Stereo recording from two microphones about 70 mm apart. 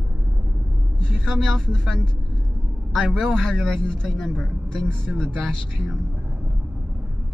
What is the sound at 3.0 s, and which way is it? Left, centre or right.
Speech, centre.